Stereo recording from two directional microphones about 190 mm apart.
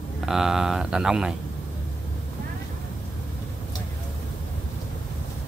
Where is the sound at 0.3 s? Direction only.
5° right (ahead or behind).